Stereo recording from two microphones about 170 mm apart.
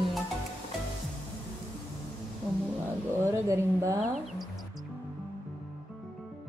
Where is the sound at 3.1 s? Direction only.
15° right (ahead or behind).